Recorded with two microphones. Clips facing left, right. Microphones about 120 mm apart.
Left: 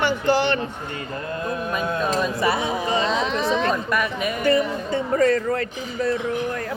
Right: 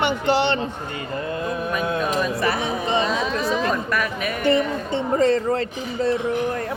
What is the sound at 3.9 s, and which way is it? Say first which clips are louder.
Speech: left 1 dB; centre (ahead or behind).